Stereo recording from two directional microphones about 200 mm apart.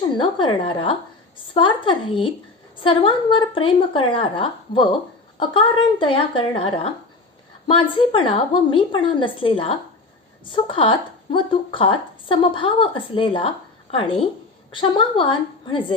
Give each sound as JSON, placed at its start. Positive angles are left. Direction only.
{"t": 0.2, "sound": "a woman's voice", "side_deg": 25}